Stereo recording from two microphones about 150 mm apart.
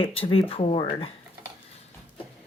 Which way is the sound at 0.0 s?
35° left (ahead or behind).